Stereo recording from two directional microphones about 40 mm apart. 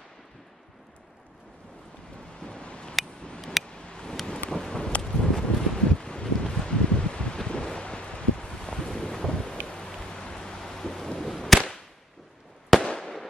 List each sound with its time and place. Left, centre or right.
2.4 s a sound: left
5.0 s wind noise: centre
5.9 s wind: left
9.7 s rain: centre
10.3 s a sound: centre
12.6 s fireworks: centre